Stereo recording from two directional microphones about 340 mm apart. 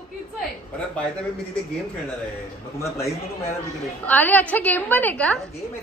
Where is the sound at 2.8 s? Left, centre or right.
Centre.